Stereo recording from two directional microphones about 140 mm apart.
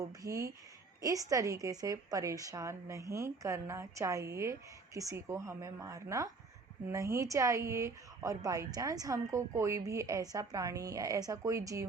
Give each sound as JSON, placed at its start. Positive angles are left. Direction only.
{"t": 0.0, "sound": "a woman's voice", "side_deg": -25}